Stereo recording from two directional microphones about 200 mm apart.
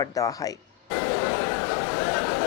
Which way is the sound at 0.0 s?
15° left (ahead or behind).